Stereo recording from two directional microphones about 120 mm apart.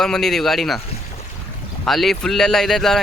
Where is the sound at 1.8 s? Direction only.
Centre (ahead or behind).